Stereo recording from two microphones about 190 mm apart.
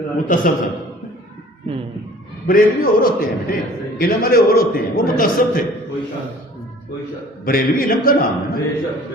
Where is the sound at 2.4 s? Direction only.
50° left (ahead or behind).